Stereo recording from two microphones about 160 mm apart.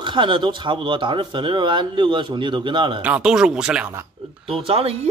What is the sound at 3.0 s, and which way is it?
Speech, 5° right (ahead or behind).